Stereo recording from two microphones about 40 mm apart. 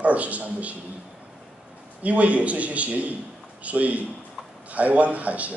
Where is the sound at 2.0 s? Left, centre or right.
Right.